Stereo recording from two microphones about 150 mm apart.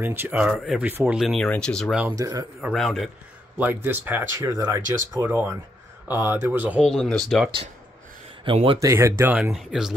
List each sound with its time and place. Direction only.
0.0 s speech: 15° right (ahead or behind); by 2.0 s 5° left (ahead or behind)
2.1 s speech: 25° right (ahead or behind)
2.6 s speech: centre (ahead or behind)
3.5 s speech: 10° right (ahead or behind)
4.4 s speech: 25° right (ahead or behind)
5.2 s speech: 15° right (ahead or behind)
6.9 s speech: 5° left (ahead or behind)
8.8 s speech: 20° right (ahead or behind); by 9.9 s 5° right (ahead or behind)